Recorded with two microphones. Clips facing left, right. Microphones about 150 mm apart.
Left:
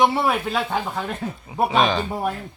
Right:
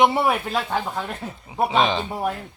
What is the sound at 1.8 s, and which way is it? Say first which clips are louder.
Speech: left 2 dB; 20° right (ahead or behind).